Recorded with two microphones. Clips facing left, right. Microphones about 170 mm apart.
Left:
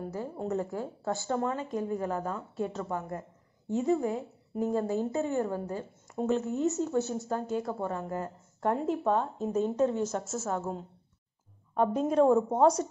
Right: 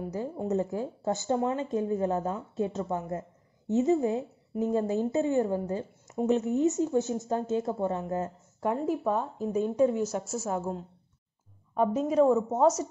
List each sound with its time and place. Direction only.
0.1 s a woman's voice: 20° right (ahead or behind)
8.5 s speech: 5° right (ahead or behind)
11.7 s a woman's voice: 5° right (ahead or behind)